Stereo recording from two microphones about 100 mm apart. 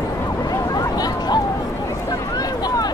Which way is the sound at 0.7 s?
40° left (ahead or behind).